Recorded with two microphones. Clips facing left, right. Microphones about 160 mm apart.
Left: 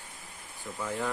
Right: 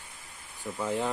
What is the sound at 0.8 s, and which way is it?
Speech, 20° right (ahead or behind).